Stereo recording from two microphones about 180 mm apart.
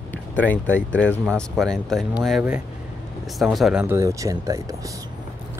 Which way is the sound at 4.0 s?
15° right (ahead or behind).